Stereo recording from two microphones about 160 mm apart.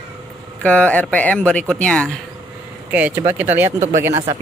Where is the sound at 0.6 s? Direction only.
10° left (ahead or behind).